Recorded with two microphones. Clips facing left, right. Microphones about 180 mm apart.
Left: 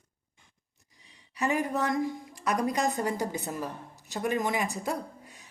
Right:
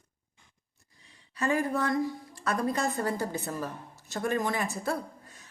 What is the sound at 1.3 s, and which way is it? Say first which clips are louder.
Speech: even; 15° left (ahead or behind).